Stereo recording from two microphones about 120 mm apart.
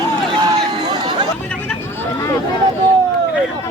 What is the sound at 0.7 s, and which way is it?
Run, 40° right (ahead or behind).